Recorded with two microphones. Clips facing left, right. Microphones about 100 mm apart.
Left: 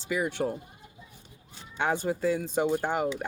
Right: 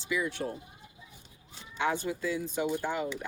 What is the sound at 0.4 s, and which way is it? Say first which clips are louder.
Speech: left 6 dB; 80° left.